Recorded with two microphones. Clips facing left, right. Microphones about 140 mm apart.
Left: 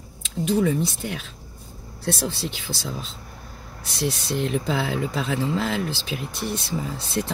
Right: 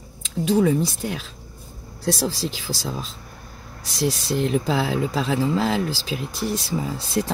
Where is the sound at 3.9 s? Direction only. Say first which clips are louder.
Right 3 dB; 30° right (ahead or behind).